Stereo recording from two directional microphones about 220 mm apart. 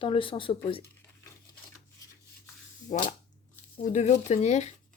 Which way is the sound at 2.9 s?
35° left (ahead or behind).